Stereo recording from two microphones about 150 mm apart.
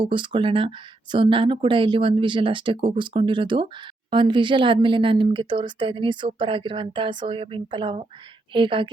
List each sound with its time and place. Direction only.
0.0 s speech: 35° right (ahead or behind)